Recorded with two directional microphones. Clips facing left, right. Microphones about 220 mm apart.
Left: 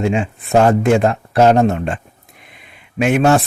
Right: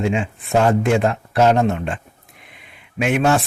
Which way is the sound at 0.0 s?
45° left (ahead or behind).